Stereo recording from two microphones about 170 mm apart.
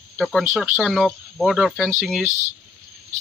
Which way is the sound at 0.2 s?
Centre (ahead or behind).